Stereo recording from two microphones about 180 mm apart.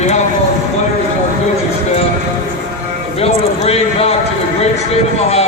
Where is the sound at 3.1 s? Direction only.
35° left (ahead or behind).